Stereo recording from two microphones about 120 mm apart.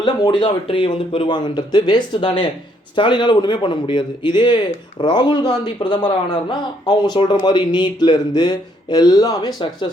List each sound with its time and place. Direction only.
0.0 s speech: 40° left (ahead or behind)